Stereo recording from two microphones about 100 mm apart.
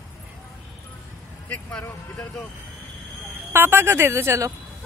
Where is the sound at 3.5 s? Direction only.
25° right (ahead or behind).